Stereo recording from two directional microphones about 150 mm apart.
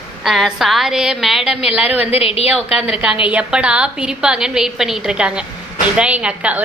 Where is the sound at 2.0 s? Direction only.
40° left (ahead or behind).